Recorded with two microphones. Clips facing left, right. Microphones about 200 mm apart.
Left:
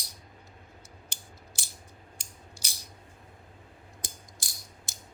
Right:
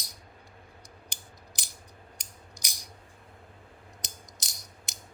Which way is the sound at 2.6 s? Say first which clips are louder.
Even; 15° right (ahead or behind).